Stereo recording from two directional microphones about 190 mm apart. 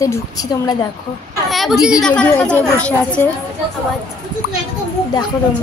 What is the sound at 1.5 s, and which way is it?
A woman's voice, centre (ahead or behind).